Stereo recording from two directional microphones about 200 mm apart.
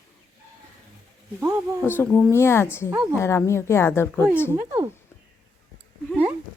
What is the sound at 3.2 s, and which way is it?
Speech, 15° left (ahead or behind).